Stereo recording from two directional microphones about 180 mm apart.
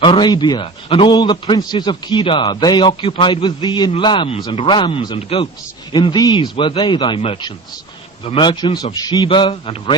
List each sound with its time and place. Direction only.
0.0 s a man's voice: 25° left (ahead or behind)